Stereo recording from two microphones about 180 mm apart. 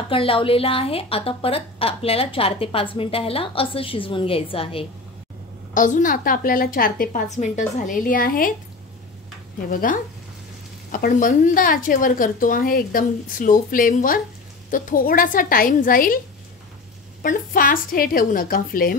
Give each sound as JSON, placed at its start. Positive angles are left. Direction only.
{"t": 0.1, "sound": "a woman's voice", "side_deg": 30}
{"t": 5.8, "sound": "a woman's voice", "side_deg": 45}
{"t": 9.7, "sound": "a woman's voice", "side_deg": 50}
{"t": 17.2, "sound": "a woman's voice", "side_deg": 50}